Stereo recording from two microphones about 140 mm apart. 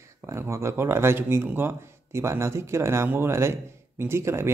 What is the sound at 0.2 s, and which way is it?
Speech, 20° right (ahead or behind).